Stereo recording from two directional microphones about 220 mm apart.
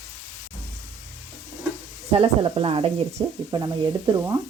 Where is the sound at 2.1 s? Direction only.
25° right (ahead or behind).